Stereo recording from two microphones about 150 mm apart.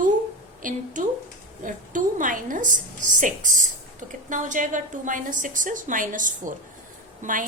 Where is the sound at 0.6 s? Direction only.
60° right (ahead or behind).